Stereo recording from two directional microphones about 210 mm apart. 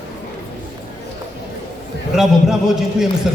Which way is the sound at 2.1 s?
Centre (ahead or behind).